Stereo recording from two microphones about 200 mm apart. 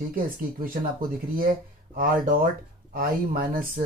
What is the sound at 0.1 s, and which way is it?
Speech, 45° right (ahead or behind).